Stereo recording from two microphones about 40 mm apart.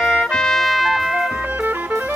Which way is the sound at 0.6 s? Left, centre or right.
Centre.